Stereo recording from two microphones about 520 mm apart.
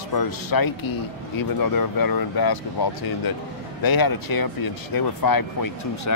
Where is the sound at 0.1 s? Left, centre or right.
Left.